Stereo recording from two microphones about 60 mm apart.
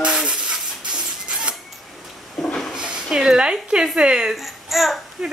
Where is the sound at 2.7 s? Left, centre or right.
Centre.